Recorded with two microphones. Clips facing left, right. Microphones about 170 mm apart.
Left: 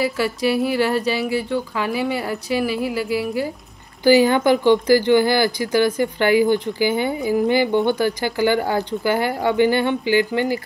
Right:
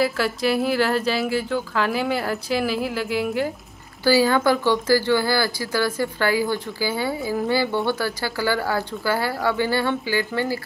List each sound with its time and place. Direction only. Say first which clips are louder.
0.2 s speech: left 2 dB; 5° left (ahead or behind)
4.0 s speech: left 4 dB; 20° left (ahead or behind)